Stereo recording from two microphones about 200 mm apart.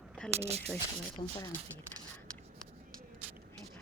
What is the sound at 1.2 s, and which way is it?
Speech, 30° left (ahead or behind).